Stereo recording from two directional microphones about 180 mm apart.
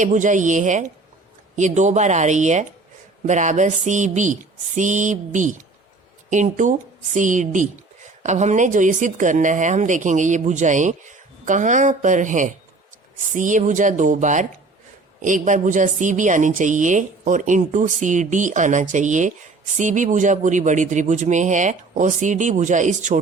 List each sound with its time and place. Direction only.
0.0 s a woman's voice: 45° right (ahead or behind)